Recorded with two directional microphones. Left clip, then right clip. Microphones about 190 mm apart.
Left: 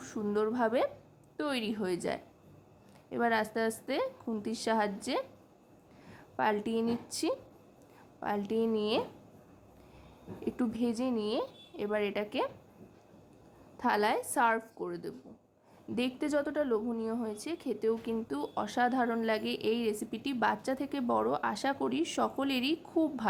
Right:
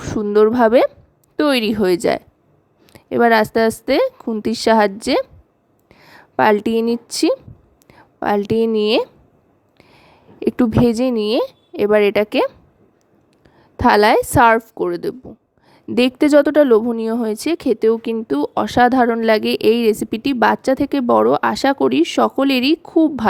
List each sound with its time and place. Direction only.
0.0 s a woman's voice: 45° right (ahead or behind)
10.4 s speech: 50° right (ahead or behind)
13.7 s speech: 50° right (ahead or behind)